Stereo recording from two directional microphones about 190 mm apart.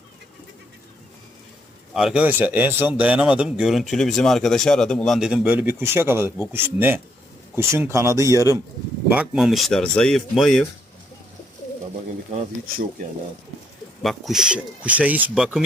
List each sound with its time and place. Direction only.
1.9 s speech: centre (ahead or behind)
9.0 s speech: 5° right (ahead or behind)
14.0 s speech: centre (ahead or behind)